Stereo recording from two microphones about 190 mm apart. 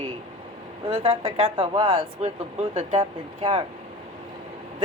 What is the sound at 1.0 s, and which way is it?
Speech, 30° right (ahead or behind).